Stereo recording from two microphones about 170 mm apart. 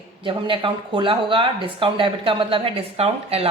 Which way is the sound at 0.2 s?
30° right (ahead or behind).